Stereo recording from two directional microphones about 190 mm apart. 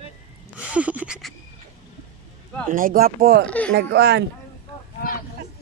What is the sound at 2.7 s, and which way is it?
Speech, 50° right (ahead or behind).